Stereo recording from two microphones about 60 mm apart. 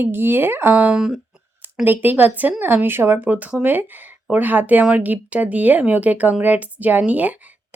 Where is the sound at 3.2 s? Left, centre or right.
Right.